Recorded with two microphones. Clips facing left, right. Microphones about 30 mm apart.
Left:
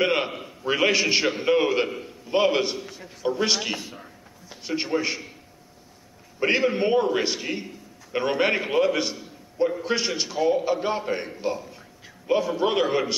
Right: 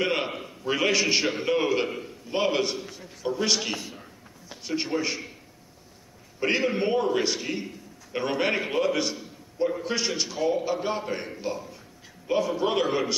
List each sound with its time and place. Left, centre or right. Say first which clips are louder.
0.0 s a sound: left 3 dB; centre
0.3 s a man's voice: even; centre
0.7 s a man's voice: left 2 dB; centre
6.4 s a man's voice: left 3 dB; centre